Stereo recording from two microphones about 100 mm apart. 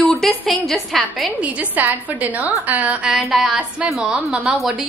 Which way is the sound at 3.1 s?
Centre (ahead or behind).